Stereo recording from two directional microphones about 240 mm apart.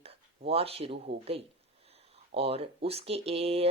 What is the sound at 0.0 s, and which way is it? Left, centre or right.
Speech, right.